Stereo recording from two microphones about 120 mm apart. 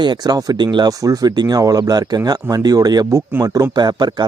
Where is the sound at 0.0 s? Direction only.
35° right (ahead or behind).